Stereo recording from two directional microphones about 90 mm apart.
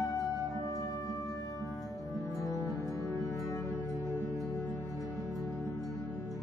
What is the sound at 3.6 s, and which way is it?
Music, 45° right (ahead or behind).